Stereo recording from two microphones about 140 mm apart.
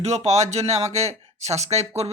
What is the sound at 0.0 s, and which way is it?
Speech, 50° right (ahead or behind).